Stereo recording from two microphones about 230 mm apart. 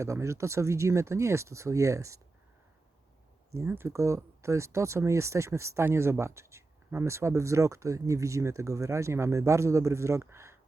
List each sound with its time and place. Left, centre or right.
0.0 s speech: centre
3.5 s speech: centre